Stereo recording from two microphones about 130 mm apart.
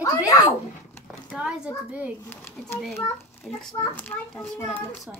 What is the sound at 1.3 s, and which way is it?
Speech, 10° right (ahead or behind).